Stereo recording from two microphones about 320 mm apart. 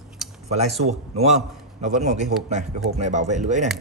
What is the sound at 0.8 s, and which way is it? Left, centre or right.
Speech, centre.